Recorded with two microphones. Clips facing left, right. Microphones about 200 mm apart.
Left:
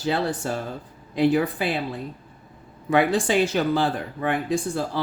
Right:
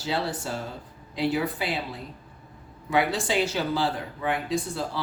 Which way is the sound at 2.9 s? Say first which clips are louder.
Left 5 dB; 50° left (ahead or behind).